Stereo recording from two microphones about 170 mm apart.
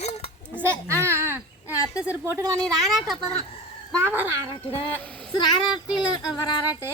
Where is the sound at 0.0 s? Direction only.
35° left (ahead or behind).